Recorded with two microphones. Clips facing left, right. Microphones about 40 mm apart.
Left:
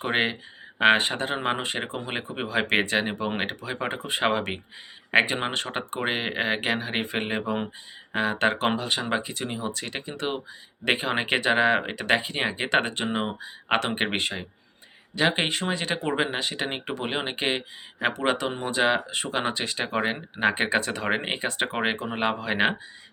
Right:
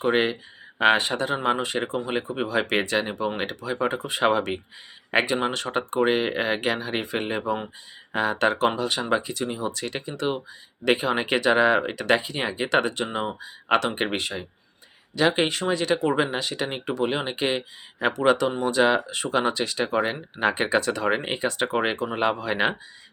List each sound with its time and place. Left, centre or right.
0.0 s speech: left
6.0 s speech: centre